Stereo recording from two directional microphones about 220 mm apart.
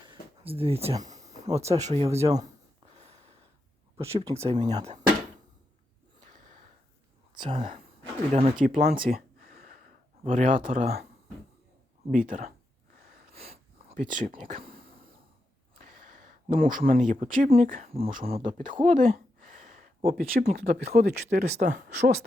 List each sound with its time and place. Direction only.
0.1 s speech: 25° right (ahead or behind)
1.1 s a sound: 30° right (ahead or behind)
1.5 s speech: 30° right (ahead or behind)
3.9 s speech: 25° right (ahead or behind)
6.2 s gasp: 35° right (ahead or behind)
7.3 s speech: 25° right (ahead or behind)
12.1 s speech: 40° right (ahead or behind)
13.3 s a sound: 25° right (ahead or behind)
15.7 s speech: 35° right (ahead or behind)